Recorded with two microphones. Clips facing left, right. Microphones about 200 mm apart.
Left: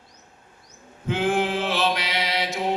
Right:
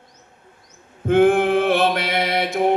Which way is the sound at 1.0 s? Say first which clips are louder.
Right 8 dB; 55° right (ahead or behind).